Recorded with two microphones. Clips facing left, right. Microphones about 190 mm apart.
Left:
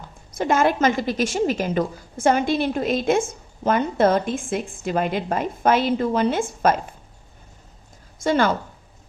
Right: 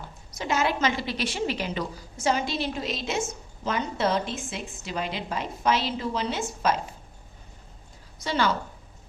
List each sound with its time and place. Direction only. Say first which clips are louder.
0.3 s a woman's voice: left 7 dB; 50° left (ahead or behind)
8.2 s a woman's voice: left 6 dB; 50° left (ahead or behind)